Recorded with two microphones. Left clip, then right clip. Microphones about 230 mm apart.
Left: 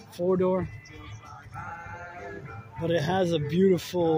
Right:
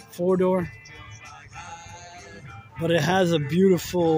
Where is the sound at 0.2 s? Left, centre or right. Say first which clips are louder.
Right 3 dB; centre.